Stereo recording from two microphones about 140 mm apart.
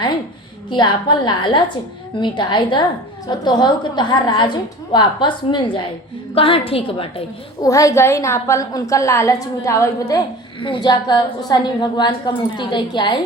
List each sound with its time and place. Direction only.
0.7 s a woman's voice: 30° left (ahead or behind)
7.6 s a woman's voice: 25° left (ahead or behind)
10.6 s a woman's voice: 35° left (ahead or behind)